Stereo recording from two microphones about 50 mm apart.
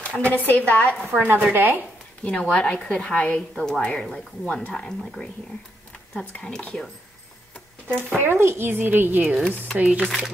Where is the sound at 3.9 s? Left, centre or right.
Centre.